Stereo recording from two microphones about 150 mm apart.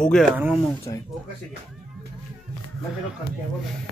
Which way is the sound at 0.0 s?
5° left (ahead or behind).